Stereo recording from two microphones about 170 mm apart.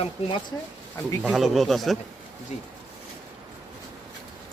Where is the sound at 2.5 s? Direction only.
40° left (ahead or behind).